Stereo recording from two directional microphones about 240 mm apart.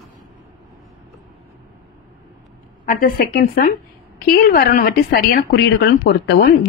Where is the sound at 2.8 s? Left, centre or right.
Left.